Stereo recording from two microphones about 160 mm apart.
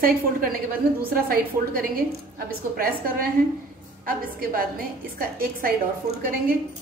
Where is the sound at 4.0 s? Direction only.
65° right (ahead or behind).